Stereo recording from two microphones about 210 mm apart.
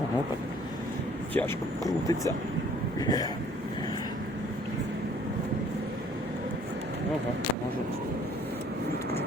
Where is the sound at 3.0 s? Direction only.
20° left (ahead or behind).